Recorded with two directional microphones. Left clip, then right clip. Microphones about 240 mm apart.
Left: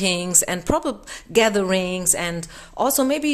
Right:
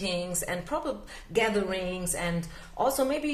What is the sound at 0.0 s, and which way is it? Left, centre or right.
Speech, left.